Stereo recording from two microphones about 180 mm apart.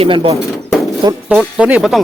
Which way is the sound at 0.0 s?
30° right (ahead or behind).